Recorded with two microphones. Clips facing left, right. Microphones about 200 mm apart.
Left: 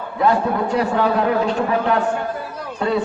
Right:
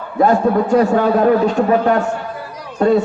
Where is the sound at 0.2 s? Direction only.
45° right (ahead or behind).